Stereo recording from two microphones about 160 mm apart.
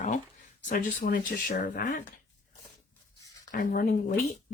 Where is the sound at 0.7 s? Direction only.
60° left (ahead or behind).